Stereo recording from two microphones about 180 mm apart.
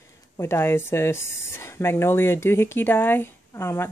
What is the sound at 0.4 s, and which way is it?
Speech, 15° left (ahead or behind).